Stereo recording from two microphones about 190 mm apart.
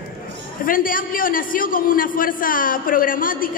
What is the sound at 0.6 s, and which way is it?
A man's voice, 45° left (ahead or behind).